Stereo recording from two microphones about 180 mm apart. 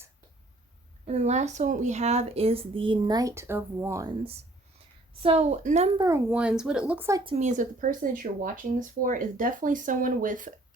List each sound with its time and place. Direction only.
1.0 s speech: 40° right (ahead or behind)
6.0 s speech: 15° right (ahead or behind)
7.3 s speech: 40° right (ahead or behind)